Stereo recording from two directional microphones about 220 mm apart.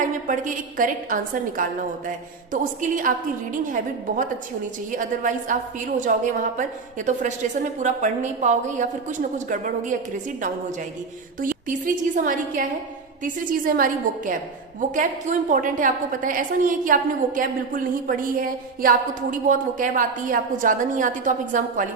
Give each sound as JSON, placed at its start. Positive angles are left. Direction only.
{"t": 0.0, "sound": "a woman's voice", "side_deg": -35}
{"t": 11.7, "sound": "a woman's voice", "side_deg": -35}